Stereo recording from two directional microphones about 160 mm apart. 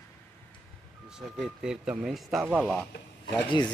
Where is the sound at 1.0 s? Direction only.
5° right (ahead or behind).